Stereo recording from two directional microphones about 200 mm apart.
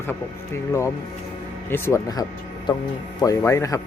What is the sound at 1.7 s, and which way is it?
Speech, 15° left (ahead or behind).